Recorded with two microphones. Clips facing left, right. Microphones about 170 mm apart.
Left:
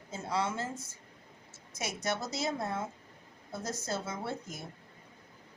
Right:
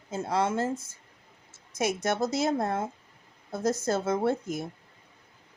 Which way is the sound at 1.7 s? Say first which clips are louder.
Right 7 dB; 50° right (ahead or behind).